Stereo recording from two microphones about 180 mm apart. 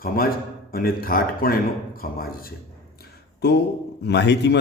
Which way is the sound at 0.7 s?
55° left (ahead or behind).